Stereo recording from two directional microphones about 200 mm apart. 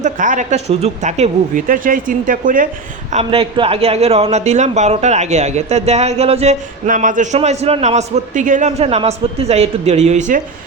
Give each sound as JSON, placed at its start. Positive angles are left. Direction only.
{"t": 0.0, "sound": "speech", "side_deg": -40}
{"t": 3.1, "sound": "speech", "side_deg": -30}